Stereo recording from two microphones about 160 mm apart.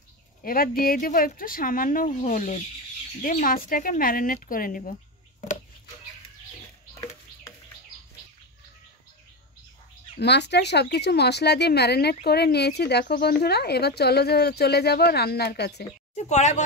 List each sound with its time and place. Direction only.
0.4 s speech: 65° left (ahead or behind)
10.1 s speech: 90° left
16.2 s a woman's voice: 45° left (ahead or behind)